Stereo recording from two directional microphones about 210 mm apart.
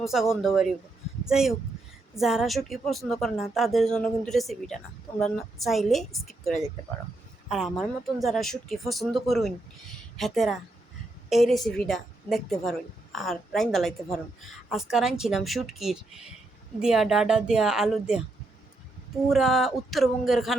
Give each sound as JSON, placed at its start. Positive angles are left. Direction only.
{"t": 0.0, "sound": "speech", "side_deg": 0}
{"t": 19.3, "sound": "speech", "side_deg": 0}